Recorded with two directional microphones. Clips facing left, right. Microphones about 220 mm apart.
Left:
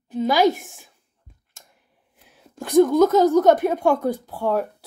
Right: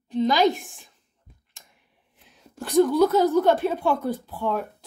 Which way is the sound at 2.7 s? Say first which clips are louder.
Left 3 dB; 45° left (ahead or behind).